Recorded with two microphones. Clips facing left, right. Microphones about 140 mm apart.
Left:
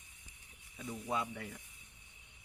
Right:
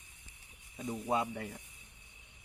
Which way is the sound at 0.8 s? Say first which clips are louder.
Right 5 dB; 40° right (ahead or behind).